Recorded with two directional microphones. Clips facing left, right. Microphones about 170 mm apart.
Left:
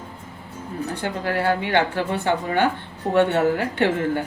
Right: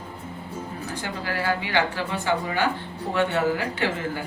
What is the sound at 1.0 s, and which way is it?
A woman's voice, 55° left (ahead or behind).